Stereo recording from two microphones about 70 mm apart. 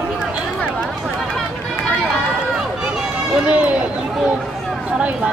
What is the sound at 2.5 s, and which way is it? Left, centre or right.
Run, centre.